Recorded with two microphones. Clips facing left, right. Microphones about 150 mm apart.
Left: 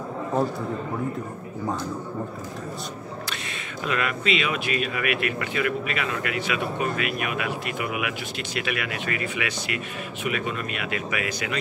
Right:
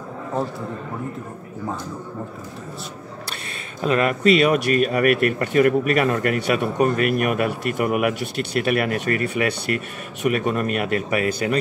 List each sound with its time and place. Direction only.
3.8 s speech: 35° right (ahead or behind)